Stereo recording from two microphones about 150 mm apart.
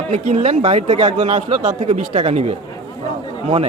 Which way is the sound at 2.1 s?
40° right (ahead or behind).